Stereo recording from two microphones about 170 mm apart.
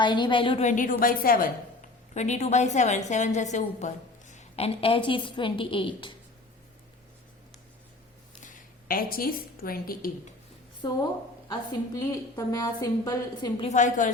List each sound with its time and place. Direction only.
0.0 s a woman's voice: 25° left (ahead or behind)
0.6 s a woman's voice: 50° left (ahead or behind)
2.1 s a woman's voice: 40° left (ahead or behind)
8.4 s a woman's voice: 50° left (ahead or behind)
10.8 s a woman's voice: 25° left (ahead or behind)
13.6 s a woman's voice: 40° left (ahead or behind)